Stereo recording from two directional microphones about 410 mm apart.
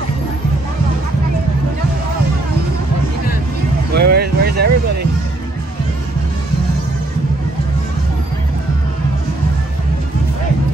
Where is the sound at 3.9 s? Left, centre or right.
Right.